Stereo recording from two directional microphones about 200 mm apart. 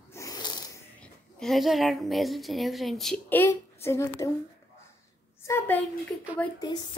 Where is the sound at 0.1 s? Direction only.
15° left (ahead or behind).